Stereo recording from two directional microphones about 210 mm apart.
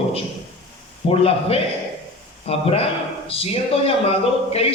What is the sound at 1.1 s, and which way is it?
Speech, 30° left (ahead or behind).